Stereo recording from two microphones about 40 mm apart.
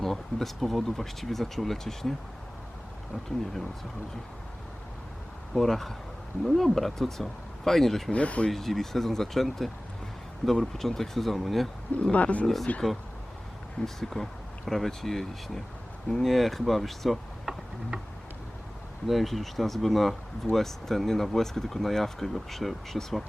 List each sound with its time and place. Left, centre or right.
0.0 s speech: centre
5.5 s speech: centre
8.1 s speech: left
8.4 s speech: centre
12.1 s speech: left
13.8 s speech: centre
19.0 s speech: centre